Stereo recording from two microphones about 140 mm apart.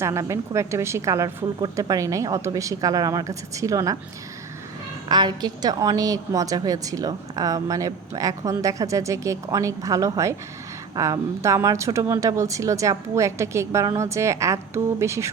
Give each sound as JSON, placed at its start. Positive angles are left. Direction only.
{"t": 0.0, "sound": "a woman's voice", "side_deg": -20}
{"t": 5.0, "sound": "a woman's voice", "side_deg": -30}